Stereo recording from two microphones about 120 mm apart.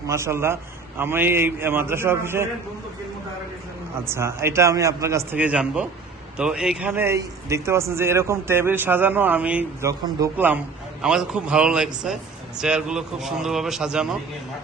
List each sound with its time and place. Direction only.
0.1 s a man's voice: 20° right (ahead or behind)
4.0 s a man's voice: 20° right (ahead or behind)
5.4 s a man's voice: 10° right (ahead or behind)